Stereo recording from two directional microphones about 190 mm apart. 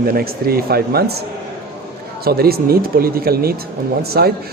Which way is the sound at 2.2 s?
55° right (ahead or behind).